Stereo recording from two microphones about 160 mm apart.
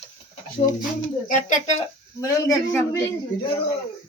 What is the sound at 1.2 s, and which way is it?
Speech, 55° left (ahead or behind).